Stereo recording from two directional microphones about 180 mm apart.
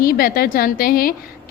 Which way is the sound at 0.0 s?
55° left (ahead or behind).